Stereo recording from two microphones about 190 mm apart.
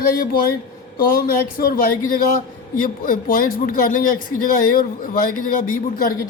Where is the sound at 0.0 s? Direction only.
50° left (ahead or behind).